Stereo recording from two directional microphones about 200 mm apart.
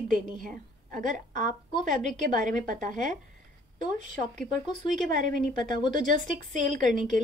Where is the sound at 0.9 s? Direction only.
40° right (ahead or behind).